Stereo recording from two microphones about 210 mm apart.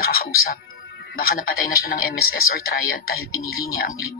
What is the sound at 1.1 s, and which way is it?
Speech, 45° left (ahead or behind).